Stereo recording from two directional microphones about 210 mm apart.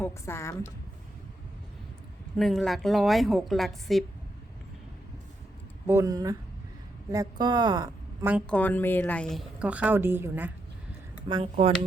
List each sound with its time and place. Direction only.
0.0 s a woman's voice: 10° left (ahead or behind)
2.4 s speech: centre (ahead or behind)
5.9 s a woman's voice: 15° right (ahead or behind)
8.3 s speech: centre (ahead or behind)
11.3 s speech: 25° right (ahead or behind)